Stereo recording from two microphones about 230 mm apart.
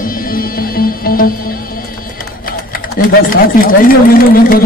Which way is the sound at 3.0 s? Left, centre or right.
Left.